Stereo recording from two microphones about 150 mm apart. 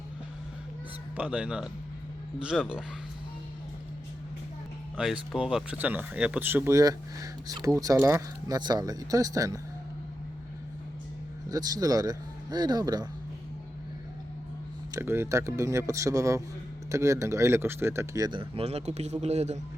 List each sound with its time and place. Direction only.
1.1 s speech: 10° right (ahead or behind)
4.9 s speech: 5° right (ahead or behind); by 9.6 s 25° right (ahead or behind)
11.4 s speech: 25° right (ahead or behind)
14.9 s speech: 15° right (ahead or behind); by 19.5 s 45° right (ahead or behind)